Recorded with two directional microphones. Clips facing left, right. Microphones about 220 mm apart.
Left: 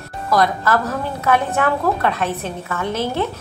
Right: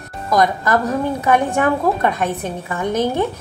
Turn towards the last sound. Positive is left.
turn(degrees=-15)  # may be behind; listen again after turning